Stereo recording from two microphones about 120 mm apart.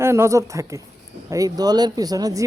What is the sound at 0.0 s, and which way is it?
Speech, 20° right (ahead or behind).